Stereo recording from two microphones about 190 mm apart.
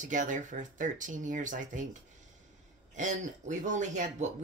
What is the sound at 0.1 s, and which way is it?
Speech, 40° right (ahead or behind).